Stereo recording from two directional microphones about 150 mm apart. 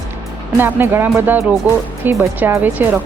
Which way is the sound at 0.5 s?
15° right (ahead or behind).